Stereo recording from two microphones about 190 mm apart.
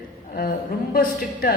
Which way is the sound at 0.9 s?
50° left (ahead or behind).